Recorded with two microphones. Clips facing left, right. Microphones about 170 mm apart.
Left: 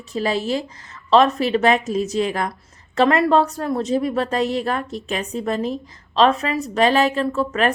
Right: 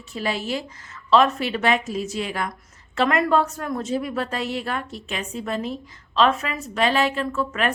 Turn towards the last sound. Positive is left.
turn(degrees=40)  # may be behind; listen again after turning